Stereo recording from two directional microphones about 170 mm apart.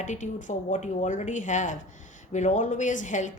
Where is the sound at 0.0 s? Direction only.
45° left (ahead or behind).